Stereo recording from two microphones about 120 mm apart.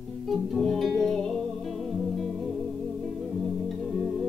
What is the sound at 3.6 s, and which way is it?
Music, centre (ahead or behind).